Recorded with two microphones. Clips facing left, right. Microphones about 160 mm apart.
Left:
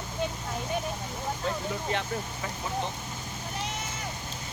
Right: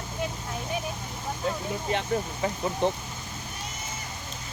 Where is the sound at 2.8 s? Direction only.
60° right (ahead or behind).